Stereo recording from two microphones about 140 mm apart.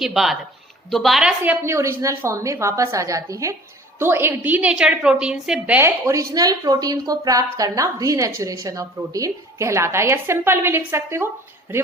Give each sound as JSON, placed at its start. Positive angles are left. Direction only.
{"t": 0.0, "sound": "a woman's voice", "side_deg": 0}
{"t": 1.5, "sound": "a woman's voice", "side_deg": -20}